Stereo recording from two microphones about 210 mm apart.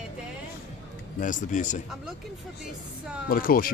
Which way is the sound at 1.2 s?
40° left (ahead or behind).